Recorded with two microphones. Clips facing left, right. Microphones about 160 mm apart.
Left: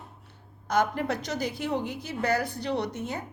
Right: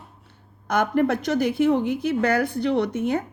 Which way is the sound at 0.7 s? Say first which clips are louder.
Right 5 dB; 55° right (ahead or behind).